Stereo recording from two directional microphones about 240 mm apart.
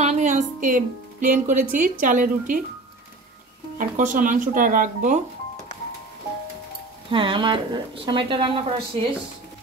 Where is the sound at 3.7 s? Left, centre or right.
Right.